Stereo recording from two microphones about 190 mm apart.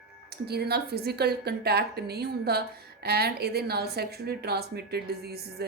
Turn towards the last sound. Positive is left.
turn(degrees=-55)  # may be behind; listen again after turning